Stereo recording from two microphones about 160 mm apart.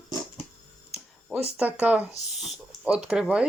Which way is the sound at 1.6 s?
10° right (ahead or behind).